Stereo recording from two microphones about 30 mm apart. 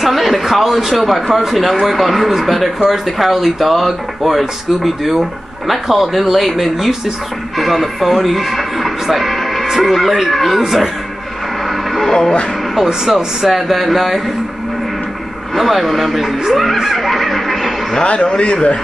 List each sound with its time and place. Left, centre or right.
0.0 s a man's voice: centre
12.1 s speech: left
12.7 s speech: centre
15.5 s speech: centre
18.0 s a man's voice: left